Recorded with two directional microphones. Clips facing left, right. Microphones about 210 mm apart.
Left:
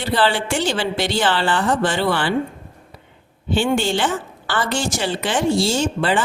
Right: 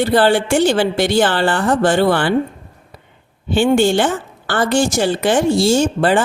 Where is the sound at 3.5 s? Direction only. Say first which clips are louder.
Right 6 dB; 50° right (ahead or behind).